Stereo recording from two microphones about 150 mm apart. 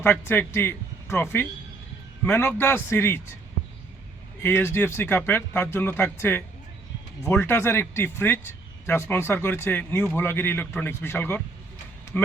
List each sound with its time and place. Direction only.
0.0 s a man's voice: 15° left (ahead or behind)
4.4 s speech: 15° left (ahead or behind)